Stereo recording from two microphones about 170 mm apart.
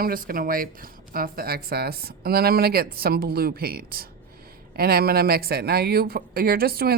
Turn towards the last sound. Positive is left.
turn(degrees=-60)  # may be behind; listen again after turning